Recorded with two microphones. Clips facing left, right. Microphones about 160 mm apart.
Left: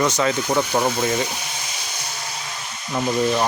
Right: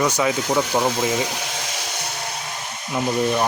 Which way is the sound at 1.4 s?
90° right.